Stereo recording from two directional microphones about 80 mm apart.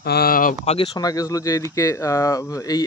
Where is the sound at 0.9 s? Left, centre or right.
Left.